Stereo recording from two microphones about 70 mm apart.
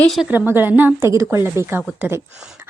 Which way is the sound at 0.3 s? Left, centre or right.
Right.